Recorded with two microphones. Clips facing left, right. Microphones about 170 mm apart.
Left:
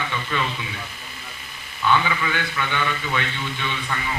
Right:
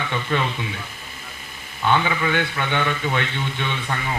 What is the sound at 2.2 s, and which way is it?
A man's voice, 50° right (ahead or behind).